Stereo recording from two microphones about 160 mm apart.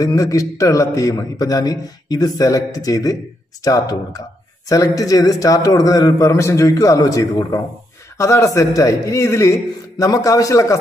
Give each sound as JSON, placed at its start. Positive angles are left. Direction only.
{"t": 0.0, "sound": "a man's voice", "side_deg": 20}